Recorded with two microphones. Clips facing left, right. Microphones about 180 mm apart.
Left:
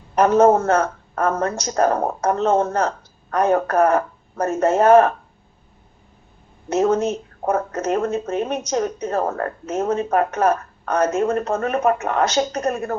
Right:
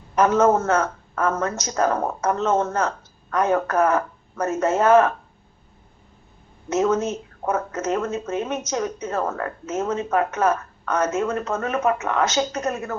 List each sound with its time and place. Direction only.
0.2 s speech: 35° left (ahead or behind)
6.7 s speech: 35° left (ahead or behind)